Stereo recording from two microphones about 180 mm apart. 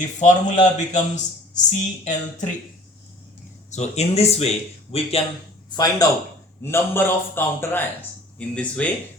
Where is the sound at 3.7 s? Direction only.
40° left (ahead or behind).